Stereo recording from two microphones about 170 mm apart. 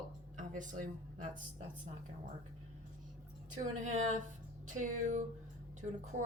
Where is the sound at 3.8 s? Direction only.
45° right (ahead or behind).